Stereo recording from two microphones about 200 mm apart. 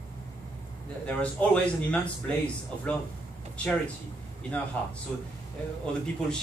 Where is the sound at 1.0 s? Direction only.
5° left (ahead or behind).